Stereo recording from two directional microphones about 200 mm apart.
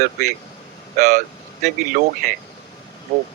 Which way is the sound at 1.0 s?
35° right (ahead or behind).